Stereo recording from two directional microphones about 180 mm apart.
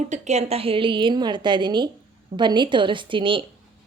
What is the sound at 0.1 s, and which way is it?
A woman's voice, 40° right (ahead or behind).